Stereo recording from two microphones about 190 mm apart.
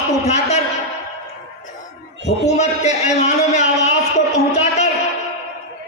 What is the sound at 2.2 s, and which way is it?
A man's voice, 35° left (ahead or behind).